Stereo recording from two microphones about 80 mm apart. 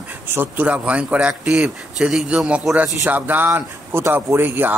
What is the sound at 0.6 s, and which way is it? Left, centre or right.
A man's voice, centre.